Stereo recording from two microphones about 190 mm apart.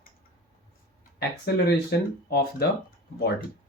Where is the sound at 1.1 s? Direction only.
55° left (ahead or behind).